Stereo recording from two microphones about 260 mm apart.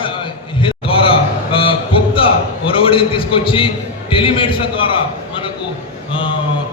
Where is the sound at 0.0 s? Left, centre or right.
Centre.